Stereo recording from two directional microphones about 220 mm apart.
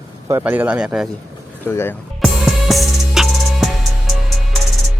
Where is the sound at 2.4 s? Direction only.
Centre (ahead or behind).